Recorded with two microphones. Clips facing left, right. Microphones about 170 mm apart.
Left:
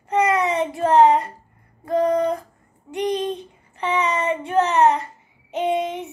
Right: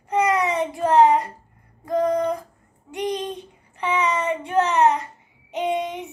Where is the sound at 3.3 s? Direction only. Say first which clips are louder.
Left 4 dB; 15° right (ahead or behind).